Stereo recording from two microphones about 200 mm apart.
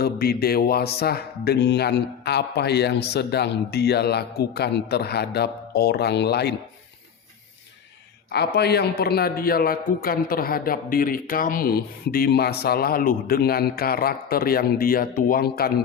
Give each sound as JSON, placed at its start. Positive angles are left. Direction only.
{"t": 0.0, "sound": "speech", "side_deg": 50}
{"t": 8.3, "sound": "a man's voice", "side_deg": 55}